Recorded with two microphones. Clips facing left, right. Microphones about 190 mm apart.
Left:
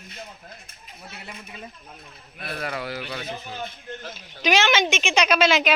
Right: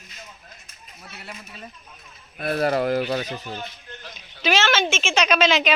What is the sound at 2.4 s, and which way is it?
Speech, 40° right (ahead or behind).